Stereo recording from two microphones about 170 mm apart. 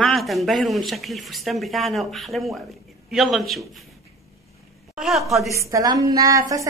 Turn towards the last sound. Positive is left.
turn(degrees=-20)  # may be behind; listen again after turning